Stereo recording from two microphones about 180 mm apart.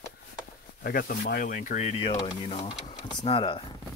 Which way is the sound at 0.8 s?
55° left (ahead or behind).